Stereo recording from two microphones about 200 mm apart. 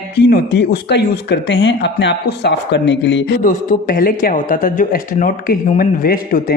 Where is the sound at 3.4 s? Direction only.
40° left (ahead or behind).